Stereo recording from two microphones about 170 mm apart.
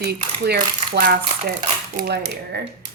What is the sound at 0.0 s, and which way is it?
Speech, 70° right (ahead or behind).